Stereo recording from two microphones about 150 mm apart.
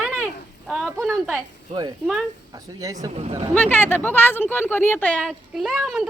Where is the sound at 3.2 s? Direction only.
45° right (ahead or behind).